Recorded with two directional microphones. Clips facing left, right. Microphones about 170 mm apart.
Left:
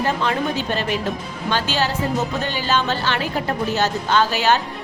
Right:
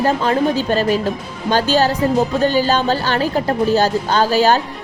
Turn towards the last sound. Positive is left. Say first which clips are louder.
# right 4 dB
turn(degrees=-40)  # may be behind; listen again after turning